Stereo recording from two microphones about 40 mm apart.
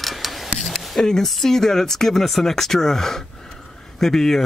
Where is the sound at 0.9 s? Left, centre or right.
Centre.